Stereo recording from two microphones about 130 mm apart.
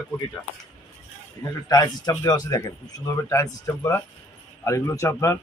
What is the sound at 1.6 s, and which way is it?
Speech, 30° left (ahead or behind).